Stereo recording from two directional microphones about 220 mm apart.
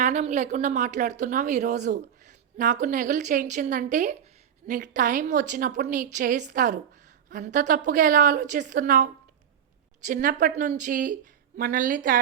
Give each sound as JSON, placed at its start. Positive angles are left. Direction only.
{"t": 0.0, "sound": "a woman's voice", "side_deg": -30}
{"t": 10.1, "sound": "a woman's voice", "side_deg": -35}